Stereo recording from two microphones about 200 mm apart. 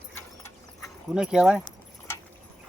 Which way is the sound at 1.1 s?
5° right (ahead or behind).